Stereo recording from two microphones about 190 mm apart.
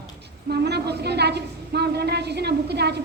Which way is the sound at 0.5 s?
60° right (ahead or behind).